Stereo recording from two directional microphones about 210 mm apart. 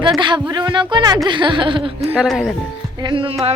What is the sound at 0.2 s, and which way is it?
Speech, 20° right (ahead or behind).